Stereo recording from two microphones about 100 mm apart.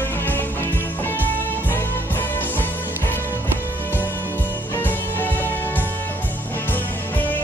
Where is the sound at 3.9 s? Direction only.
20° left (ahead or behind).